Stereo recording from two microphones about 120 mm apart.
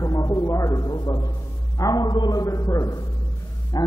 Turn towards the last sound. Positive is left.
turn(degrees=30)  # may be behind; listen again after turning